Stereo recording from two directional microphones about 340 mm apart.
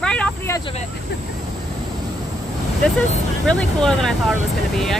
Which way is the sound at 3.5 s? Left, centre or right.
Centre.